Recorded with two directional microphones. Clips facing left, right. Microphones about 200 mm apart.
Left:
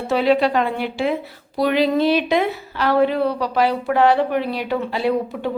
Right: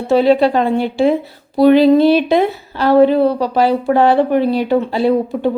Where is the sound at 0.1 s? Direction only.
30° right (ahead or behind).